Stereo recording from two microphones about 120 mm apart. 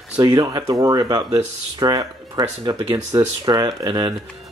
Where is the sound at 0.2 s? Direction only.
30° right (ahead or behind).